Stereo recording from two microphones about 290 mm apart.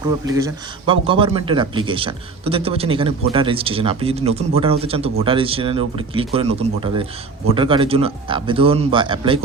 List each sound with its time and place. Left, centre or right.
0.3 s a man's voice: centre